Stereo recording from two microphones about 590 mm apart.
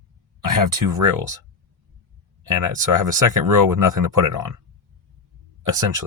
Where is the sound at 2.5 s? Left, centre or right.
Right.